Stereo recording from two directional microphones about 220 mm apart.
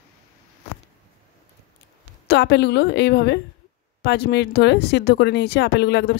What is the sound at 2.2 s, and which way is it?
A woman's voice, 50° left (ahead or behind).